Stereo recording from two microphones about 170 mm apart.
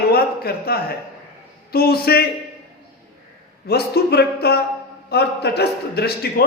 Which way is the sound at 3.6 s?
70° left (ahead or behind).